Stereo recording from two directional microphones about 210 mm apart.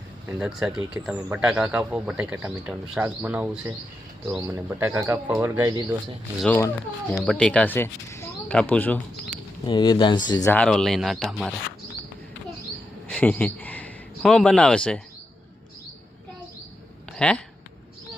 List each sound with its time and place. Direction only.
0.3 s speech: 5° right (ahead or behind)
6.4 s speech: 5° left (ahead or behind)
9.6 s speech: 20° left (ahead or behind)
10.5 s speech: 5° left (ahead or behind)
13.1 s a man's voice: 10° left (ahead or behind)
17.1 s speech: 5° left (ahead or behind)